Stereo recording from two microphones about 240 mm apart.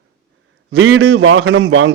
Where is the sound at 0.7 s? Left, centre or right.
Right.